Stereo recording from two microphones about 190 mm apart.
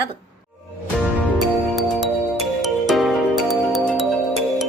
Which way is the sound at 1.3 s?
Centre (ahead or behind).